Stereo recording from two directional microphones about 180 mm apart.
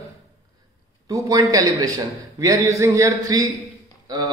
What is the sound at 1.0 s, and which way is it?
Speech, 20° right (ahead or behind).